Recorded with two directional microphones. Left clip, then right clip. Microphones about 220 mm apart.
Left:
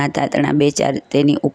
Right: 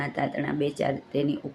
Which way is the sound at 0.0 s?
50° left (ahead or behind).